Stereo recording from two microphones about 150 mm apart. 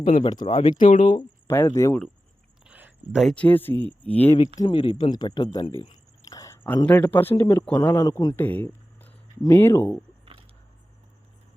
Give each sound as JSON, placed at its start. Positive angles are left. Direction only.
{"t": 0.0, "sound": "speech", "side_deg": 40}
{"t": 0.8, "sound": "speech", "side_deg": 60}
{"t": 1.5, "sound": "speech", "side_deg": 15}
{"t": 2.6, "sound": "a sound", "side_deg": -10}
{"t": 3.3, "sound": "speech", "side_deg": 10}
{"t": 4.6, "sound": "speech", "side_deg": 35}
{"t": 8.4, "sound": "a sound", "side_deg": 10}
{"t": 9.4, "sound": "speech", "side_deg": 20}